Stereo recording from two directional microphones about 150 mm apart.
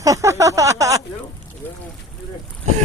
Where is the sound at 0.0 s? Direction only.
20° right (ahead or behind).